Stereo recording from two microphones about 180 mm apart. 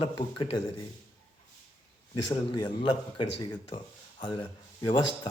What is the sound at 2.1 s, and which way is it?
Speech, 20° left (ahead or behind).